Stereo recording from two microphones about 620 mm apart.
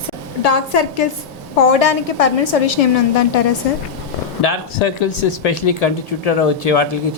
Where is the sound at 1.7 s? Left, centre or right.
Left.